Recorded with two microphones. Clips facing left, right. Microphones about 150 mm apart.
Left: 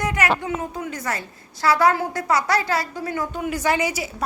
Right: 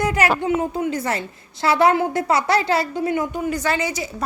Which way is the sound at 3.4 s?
10° left (ahead or behind).